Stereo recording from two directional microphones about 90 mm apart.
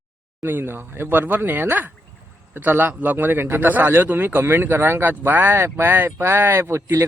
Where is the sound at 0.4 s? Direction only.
25° right (ahead or behind).